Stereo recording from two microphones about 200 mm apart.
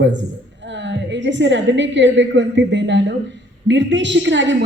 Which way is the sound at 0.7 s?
65° right (ahead or behind).